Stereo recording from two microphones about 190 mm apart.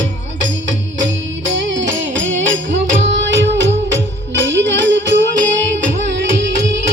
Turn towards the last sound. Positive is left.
turn(degrees=-75)  # may be behind; listen again after turning